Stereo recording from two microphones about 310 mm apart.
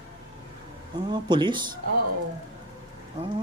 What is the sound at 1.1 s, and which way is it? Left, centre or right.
Speech, centre.